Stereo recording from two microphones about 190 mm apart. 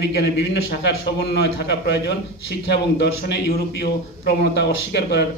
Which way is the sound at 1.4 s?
60° left (ahead or behind).